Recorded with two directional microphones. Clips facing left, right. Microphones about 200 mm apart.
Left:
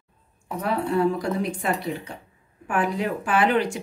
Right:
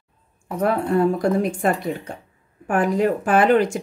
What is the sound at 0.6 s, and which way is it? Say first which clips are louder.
Speech: right 4 dB; 50° right (ahead or behind).